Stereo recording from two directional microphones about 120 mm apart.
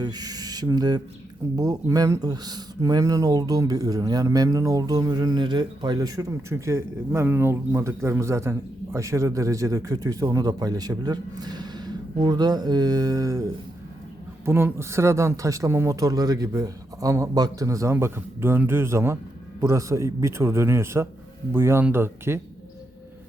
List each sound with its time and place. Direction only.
0.0 s speech: 35° right (ahead or behind)